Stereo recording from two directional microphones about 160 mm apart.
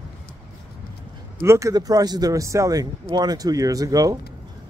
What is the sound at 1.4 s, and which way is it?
Speech, 20° right (ahead or behind).